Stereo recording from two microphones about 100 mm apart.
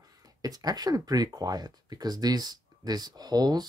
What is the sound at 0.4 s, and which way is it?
Speech, 40° right (ahead or behind).